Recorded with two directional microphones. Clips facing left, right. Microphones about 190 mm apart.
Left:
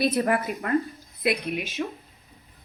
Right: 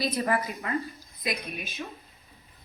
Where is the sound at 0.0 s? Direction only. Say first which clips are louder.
Left 4 dB; 60° left (ahead or behind).